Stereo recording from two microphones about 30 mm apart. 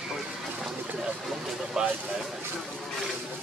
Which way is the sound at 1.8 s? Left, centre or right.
Centre.